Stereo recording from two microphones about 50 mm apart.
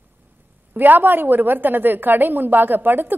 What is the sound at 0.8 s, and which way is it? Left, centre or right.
A woman's voice, right.